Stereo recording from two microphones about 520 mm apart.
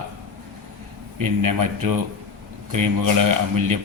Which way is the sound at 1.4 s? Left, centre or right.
Right.